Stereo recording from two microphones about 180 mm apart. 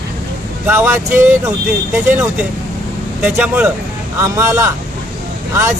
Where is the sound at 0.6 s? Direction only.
15° right (ahead or behind).